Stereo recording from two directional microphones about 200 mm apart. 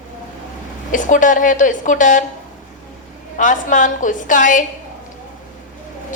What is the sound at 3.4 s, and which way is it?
A woman's voice, 40° left (ahead or behind).